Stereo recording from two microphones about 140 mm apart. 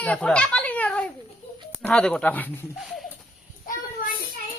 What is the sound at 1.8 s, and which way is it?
Speech, 5° left (ahead or behind).